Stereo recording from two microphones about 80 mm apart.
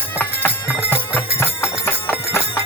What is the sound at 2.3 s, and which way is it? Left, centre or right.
Clip-clop, left.